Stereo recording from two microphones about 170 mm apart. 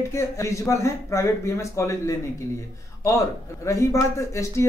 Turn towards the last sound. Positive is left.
turn(degrees=15)  # may be behind; listen again after turning